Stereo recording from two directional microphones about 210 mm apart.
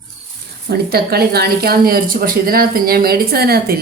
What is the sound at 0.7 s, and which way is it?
Speech, 50° right (ahead or behind).